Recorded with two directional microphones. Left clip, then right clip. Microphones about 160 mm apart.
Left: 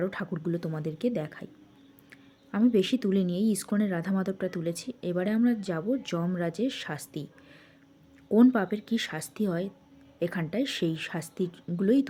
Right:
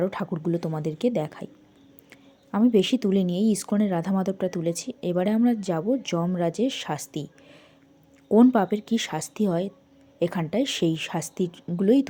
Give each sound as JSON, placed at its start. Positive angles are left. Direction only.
{"t": 0.0, "sound": "speech", "side_deg": -10}
{"t": 2.5, "sound": "speech", "side_deg": -15}
{"t": 8.3, "sound": "speech", "side_deg": -10}